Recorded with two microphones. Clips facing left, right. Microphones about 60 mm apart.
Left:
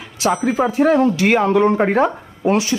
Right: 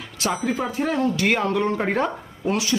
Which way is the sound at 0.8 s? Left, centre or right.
Left.